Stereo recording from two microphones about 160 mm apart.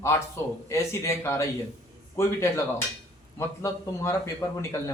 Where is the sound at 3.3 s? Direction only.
20° left (ahead or behind).